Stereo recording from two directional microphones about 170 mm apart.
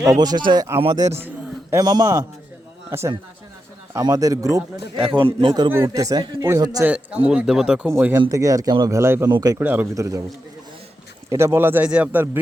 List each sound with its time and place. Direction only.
0.0 s speech: 20° right (ahead or behind)
6.8 s speech: 10° right (ahead or behind)
11.3 s speech: 15° right (ahead or behind)